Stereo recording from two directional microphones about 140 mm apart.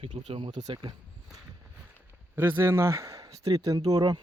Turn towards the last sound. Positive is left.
turn(degrees=-25)  # may be behind; listen again after turning